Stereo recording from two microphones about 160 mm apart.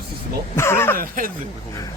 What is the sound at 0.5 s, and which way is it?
Speech, 15° left (ahead or behind).